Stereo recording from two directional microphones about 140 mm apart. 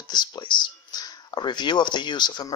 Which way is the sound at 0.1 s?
30° left (ahead or behind).